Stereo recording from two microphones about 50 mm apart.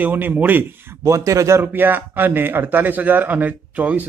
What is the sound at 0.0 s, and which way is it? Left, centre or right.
Speech, right.